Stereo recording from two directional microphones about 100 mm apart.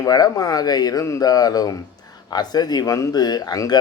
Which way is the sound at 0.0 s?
40° left (ahead or behind).